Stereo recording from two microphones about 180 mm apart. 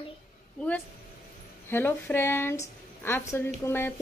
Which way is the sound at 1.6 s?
10° left (ahead or behind).